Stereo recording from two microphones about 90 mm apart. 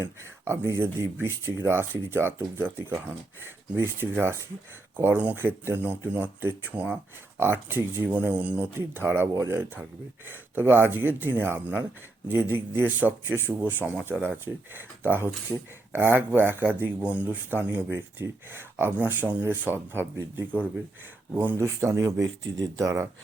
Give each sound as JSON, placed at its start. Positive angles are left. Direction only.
{"t": 0.2, "sound": "a man's voice", "side_deg": -30}
{"t": 21.3, "sound": "speech", "side_deg": -25}